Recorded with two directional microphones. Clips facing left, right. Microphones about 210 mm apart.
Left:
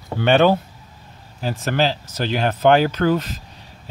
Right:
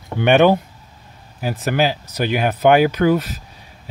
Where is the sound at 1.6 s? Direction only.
10° right (ahead or behind).